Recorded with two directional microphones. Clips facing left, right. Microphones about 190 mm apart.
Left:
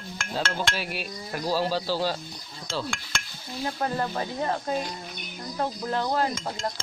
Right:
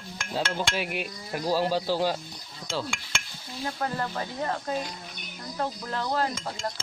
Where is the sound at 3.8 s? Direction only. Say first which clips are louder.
Left 3 dB; 25° left (ahead or behind).